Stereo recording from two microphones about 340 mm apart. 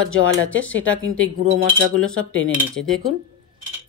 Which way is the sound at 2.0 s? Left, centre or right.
Centre.